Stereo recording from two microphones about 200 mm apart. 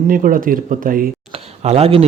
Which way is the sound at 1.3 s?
30° right (ahead or behind).